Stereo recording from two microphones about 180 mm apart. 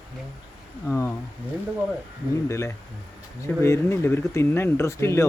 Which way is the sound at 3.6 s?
15° left (ahead or behind).